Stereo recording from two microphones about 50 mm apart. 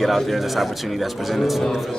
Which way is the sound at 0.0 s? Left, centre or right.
Centre.